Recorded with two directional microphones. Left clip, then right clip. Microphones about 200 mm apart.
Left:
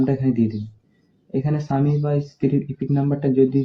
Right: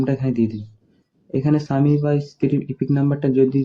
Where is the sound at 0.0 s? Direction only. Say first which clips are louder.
Even; 40° right (ahead or behind).